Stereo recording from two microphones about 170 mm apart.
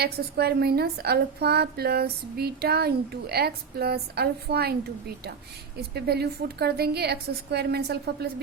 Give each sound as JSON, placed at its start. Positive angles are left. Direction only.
{"t": 0.0, "sound": "a woman's voice", "side_deg": -70}